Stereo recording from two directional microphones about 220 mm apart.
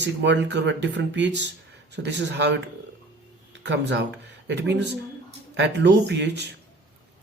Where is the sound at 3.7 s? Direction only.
50° right (ahead or behind).